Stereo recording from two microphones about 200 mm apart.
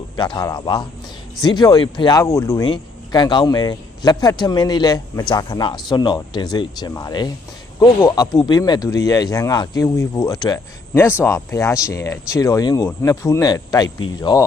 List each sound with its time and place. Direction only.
0.2 s speech: 20° left (ahead or behind)